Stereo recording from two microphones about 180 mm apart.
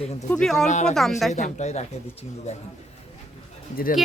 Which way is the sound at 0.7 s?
40° left (ahead or behind).